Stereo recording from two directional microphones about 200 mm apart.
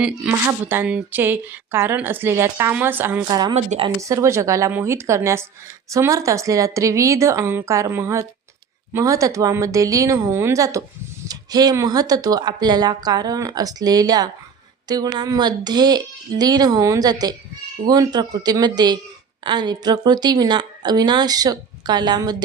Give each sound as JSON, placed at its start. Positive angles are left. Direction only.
{"t": 0.0, "sound": "speech", "side_deg": -10}
{"t": 3.5, "sound": "speech", "side_deg": -30}
{"t": 4.0, "sound": "speech", "side_deg": -15}